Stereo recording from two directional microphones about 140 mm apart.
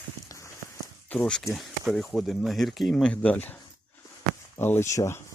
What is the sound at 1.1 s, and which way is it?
Speech, 5° left (ahead or behind).